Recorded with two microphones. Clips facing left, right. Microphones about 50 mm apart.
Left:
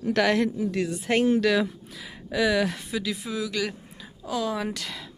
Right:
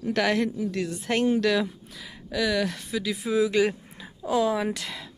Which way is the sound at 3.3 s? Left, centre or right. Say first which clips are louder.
Right 9 dB; right.